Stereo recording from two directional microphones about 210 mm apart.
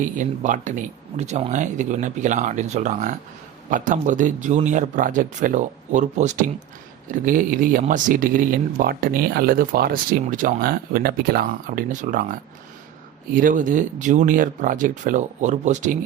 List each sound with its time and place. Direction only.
0.2 s speech: 35° right (ahead or behind)